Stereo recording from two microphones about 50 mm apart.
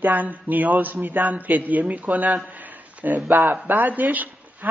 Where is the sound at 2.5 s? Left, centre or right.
Right.